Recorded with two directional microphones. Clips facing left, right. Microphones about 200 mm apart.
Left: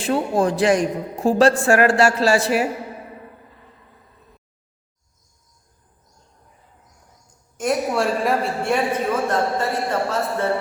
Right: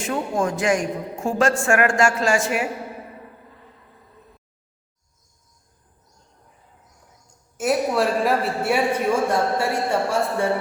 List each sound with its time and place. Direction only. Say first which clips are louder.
0.0 s a woman's voice: left 4 dB; 35° left (ahead or behind)
7.6 s a man's voice: even; 5° right (ahead or behind)